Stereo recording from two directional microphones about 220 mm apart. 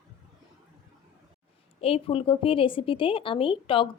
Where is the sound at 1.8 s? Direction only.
25° left (ahead or behind).